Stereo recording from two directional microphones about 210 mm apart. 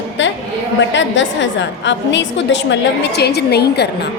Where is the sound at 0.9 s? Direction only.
60° left (ahead or behind).